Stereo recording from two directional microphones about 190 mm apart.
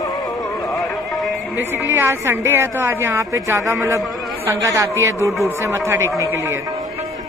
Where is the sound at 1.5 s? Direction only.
10° right (ahead or behind).